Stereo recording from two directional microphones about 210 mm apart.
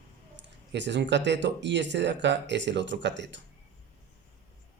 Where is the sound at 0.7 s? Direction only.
55° right (ahead or behind).